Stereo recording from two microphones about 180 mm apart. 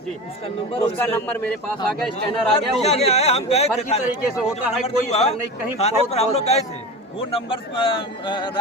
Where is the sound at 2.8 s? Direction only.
35° left (ahead or behind).